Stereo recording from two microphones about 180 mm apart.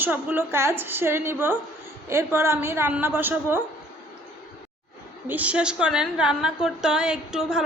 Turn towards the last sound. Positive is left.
turn(degrees=-5)  # may be behind; listen again after turning